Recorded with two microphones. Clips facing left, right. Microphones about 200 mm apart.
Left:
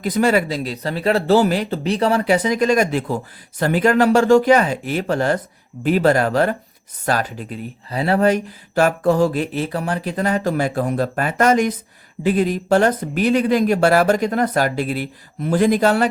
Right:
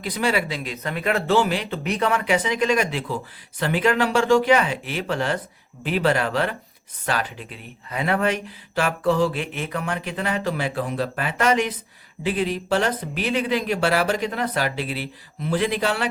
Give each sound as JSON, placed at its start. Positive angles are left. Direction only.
{"t": 0.0, "sound": "speech", "side_deg": 45}